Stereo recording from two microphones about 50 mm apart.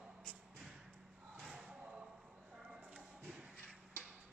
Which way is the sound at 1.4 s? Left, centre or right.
Centre.